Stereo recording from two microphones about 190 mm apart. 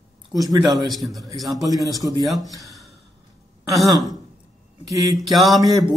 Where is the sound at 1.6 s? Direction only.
20° right (ahead or behind).